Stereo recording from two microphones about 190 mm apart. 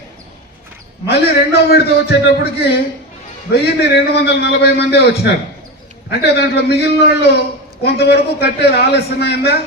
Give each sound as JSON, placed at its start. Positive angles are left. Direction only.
{"t": 1.5, "sound": "a man's voice", "side_deg": 55}